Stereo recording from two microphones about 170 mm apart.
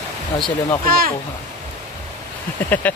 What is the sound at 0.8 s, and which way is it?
Speech, 60° right (ahead or behind).